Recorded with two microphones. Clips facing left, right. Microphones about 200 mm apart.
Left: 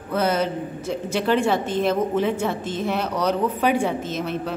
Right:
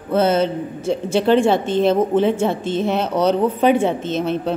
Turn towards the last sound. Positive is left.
turn(degrees=-25)  # may be behind; listen again after turning